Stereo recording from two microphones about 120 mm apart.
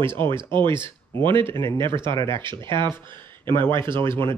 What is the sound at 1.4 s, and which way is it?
Speech, 25° left (ahead or behind).